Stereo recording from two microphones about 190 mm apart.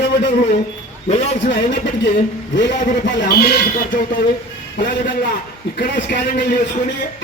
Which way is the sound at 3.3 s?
55° left (ahead or behind).